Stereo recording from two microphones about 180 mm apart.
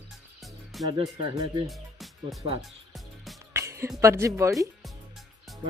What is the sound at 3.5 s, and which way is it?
Speech, 15° right (ahead or behind).